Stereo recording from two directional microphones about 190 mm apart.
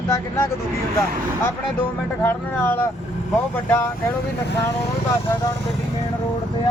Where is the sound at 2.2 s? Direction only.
10° left (ahead or behind).